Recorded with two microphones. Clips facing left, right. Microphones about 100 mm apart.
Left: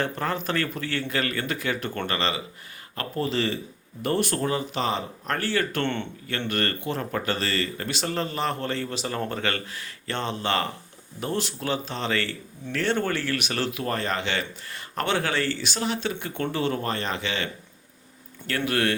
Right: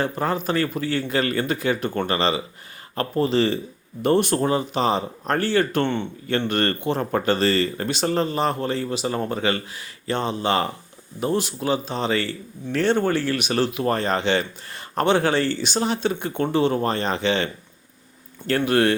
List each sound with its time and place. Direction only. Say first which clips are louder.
0.0 s speech: right 4 dB; 15° right (ahead or behind)
1.0 s speech: right 4 dB; 25° right (ahead or behind)
5.8 s speech: right 4 dB; 10° right (ahead or behind)
6.5 s speech: right 2 dB; 25° right (ahead or behind)